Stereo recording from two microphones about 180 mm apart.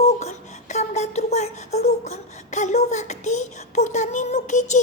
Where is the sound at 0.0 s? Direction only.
40° left (ahead or behind).